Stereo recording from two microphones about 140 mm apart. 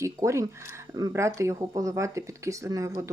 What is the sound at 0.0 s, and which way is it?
Speech, 20° right (ahead or behind).